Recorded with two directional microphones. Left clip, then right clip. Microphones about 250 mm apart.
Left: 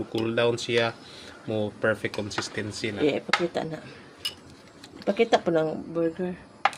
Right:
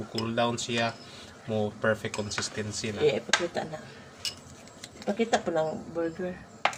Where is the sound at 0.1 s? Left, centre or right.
Left.